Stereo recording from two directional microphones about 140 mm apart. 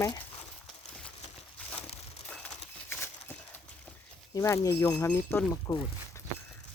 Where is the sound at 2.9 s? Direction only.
15° left (ahead or behind).